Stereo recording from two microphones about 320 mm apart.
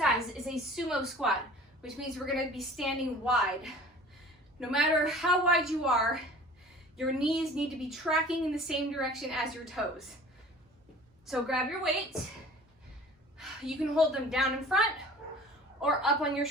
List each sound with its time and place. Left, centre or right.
0.0 s a sound: centre
1.8 s a woman's voice: centre
11.3 s a woman's voice: centre
13.4 s a woman's voice: centre